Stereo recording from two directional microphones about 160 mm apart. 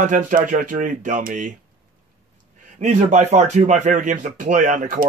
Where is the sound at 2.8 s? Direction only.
45° right (ahead or behind).